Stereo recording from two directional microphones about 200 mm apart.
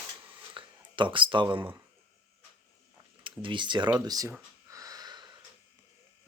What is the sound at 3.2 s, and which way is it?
Speech, 25° right (ahead or behind).